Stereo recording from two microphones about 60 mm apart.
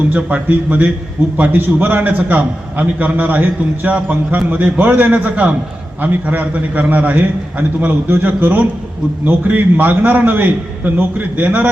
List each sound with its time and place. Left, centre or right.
0.1 s a man's voice: right
8.0 s a man's voice: right